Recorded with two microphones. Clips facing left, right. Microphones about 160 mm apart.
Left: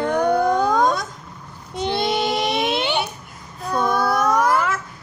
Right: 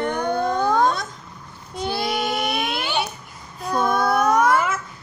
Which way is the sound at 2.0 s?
25° left (ahead or behind).